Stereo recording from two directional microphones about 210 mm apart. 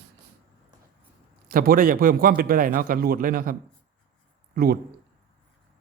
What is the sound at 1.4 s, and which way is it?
A man's voice, 45° right (ahead or behind).